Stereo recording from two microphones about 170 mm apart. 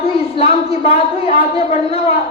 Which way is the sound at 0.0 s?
35° left (ahead or behind).